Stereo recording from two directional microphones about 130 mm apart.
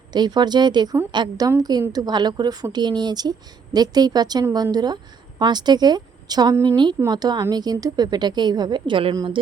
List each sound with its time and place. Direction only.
0.1 s a woman's voice: 35° right (ahead or behind)